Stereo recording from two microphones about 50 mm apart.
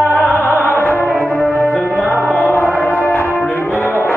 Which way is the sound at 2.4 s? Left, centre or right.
Left.